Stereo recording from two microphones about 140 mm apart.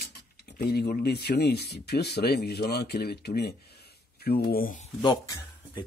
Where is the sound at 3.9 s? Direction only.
90° left.